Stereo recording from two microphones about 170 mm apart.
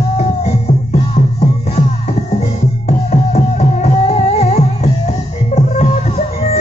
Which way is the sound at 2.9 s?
40° left (ahead or behind).